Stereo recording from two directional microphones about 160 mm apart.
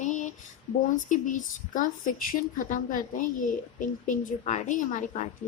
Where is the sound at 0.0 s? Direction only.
50° left (ahead or behind).